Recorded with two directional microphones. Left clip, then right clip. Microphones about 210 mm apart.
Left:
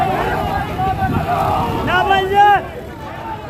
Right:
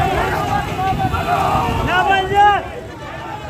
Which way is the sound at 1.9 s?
35° left (ahead or behind).